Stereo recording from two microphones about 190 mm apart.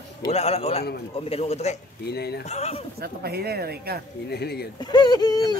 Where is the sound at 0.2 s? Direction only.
35° left (ahead or behind).